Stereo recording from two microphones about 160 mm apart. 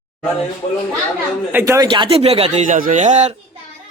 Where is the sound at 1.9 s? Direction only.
35° right (ahead or behind).